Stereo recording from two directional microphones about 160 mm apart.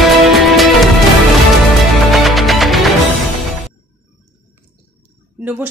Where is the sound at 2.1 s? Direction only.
Centre (ahead or behind).